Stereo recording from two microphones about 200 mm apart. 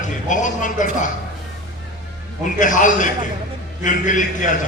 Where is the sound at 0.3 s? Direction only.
40° left (ahead or behind).